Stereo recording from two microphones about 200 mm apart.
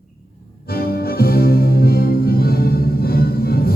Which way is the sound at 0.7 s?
50° left (ahead or behind).